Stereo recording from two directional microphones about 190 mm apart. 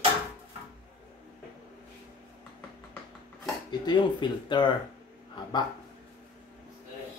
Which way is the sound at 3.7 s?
25° left (ahead or behind).